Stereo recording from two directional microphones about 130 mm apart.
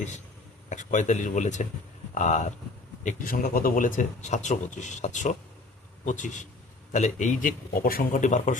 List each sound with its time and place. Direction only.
0.7 s speech: 70° left (ahead or behind)
3.0 s speech: 80° left